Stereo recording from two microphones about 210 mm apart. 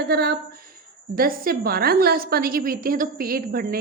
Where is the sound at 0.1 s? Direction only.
50° right (ahead or behind).